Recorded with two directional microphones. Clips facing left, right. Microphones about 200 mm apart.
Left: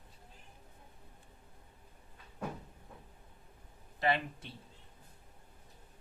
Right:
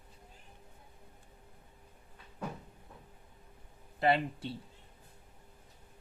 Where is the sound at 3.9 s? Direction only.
30° right (ahead or behind).